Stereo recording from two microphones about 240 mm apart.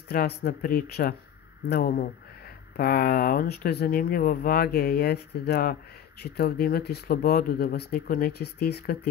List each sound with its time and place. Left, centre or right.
0.1 s speech: left